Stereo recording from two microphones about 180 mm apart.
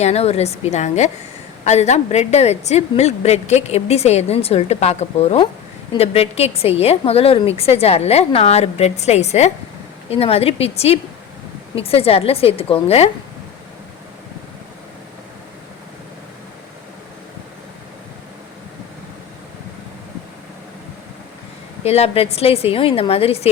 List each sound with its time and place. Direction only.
0.0 s a woman's voice: 35° left (ahead or behind)
21.8 s a woman's voice: 35° left (ahead or behind)